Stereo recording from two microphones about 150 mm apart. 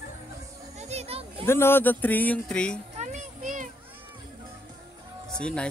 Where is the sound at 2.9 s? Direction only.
55° right (ahead or behind).